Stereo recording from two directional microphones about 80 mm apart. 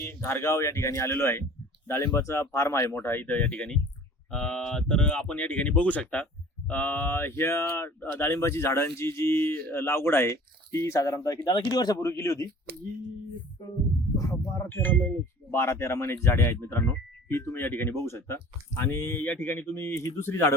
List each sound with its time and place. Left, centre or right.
0.0 s speech: left
3.4 s speech: centre; by 12.1 s left
12.1 s speech: left
14.7 s speech: left
15.4 s speech: left
20.0 s speech: left